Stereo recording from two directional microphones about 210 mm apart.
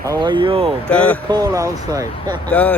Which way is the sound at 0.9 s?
5° left (ahead or behind).